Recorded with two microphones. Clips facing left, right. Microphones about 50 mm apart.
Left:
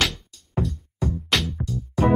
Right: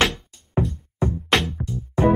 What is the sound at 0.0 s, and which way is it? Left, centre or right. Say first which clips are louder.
Music: right 4 dB; right.